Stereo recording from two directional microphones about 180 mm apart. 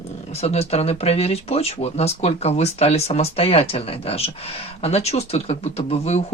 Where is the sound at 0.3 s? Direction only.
35° left (ahead or behind).